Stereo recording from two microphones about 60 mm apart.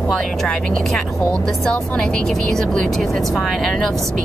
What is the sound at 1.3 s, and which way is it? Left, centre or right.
Speech, centre.